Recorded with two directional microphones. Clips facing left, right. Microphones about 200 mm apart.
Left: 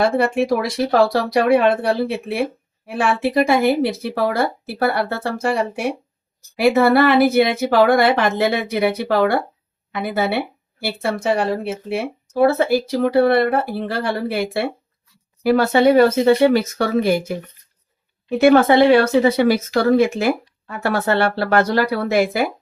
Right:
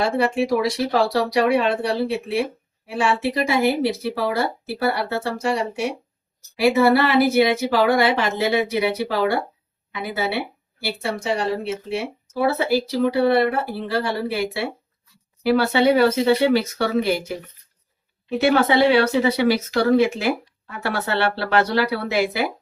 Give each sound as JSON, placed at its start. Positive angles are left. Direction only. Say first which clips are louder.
{"t": 0.2, "sound": "speech", "louder": "left 2 dB", "side_deg": 55}
{"t": 4.6, "sound": "speech", "louder": "left 3 dB", "side_deg": 55}
{"t": 18.3, "sound": "speech", "louder": "left 5 dB", "side_deg": 50}